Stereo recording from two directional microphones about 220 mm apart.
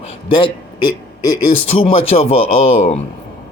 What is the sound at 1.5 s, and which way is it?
Speech, 25° left (ahead or behind).